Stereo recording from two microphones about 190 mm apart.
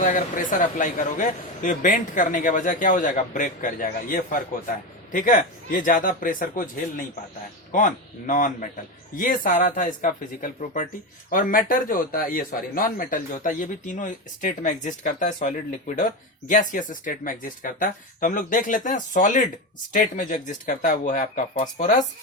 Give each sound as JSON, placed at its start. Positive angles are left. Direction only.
{"t": 0.0, "sound": "a man's voice", "side_deg": 40}